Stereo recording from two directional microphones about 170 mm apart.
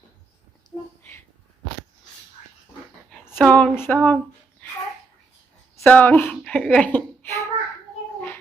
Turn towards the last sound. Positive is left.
turn(degrees=15)  # may be behind; listen again after turning